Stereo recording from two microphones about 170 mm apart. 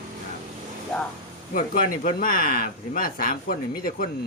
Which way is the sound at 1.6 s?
55° left (ahead or behind).